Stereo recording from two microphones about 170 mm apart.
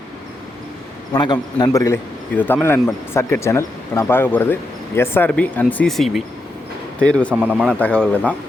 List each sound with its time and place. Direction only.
1.1 s a man's voice: 25° left (ahead or behind); by 8.4 s 10° left (ahead or behind)